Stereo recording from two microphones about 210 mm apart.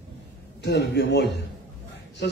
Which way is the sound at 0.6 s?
55° left (ahead or behind).